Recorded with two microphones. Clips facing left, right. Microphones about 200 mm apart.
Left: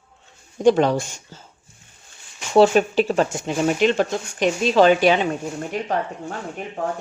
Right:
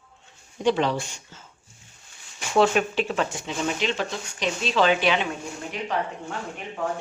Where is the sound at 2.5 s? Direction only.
35° left (ahead or behind).